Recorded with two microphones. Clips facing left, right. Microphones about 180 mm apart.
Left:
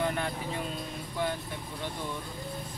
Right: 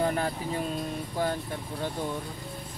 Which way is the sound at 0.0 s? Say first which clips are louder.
Right 3 dB; 35° right (ahead or behind).